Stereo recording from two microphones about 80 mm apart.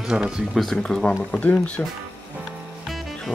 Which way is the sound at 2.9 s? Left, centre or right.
Centre.